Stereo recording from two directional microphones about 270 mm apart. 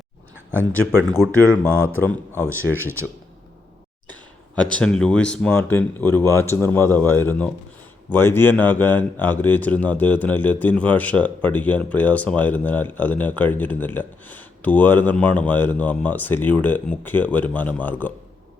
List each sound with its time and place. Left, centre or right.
0.7 s speech: centre
2.7 s speech: centre
4.8 s speech: centre